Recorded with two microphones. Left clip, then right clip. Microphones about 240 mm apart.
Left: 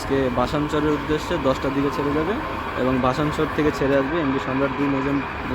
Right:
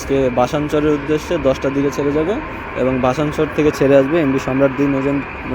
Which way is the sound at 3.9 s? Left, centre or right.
Centre.